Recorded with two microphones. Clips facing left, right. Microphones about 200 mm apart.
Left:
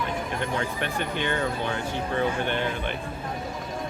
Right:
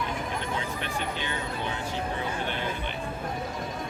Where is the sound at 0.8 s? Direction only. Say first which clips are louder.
Left 4 dB; 55° left (ahead or behind).